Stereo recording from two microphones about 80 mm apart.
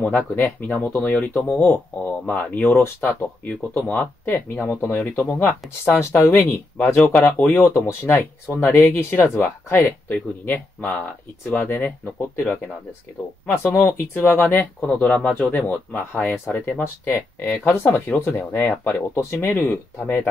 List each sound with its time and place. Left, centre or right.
0.0 s speech: left